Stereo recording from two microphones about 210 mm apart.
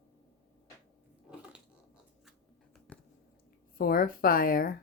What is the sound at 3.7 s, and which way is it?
Speech, 45° left (ahead or behind).